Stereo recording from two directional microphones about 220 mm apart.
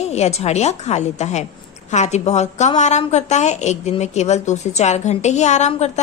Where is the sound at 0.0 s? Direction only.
30° left (ahead or behind).